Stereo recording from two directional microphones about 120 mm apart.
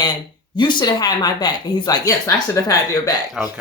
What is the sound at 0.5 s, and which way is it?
Speech, 40° left (ahead or behind).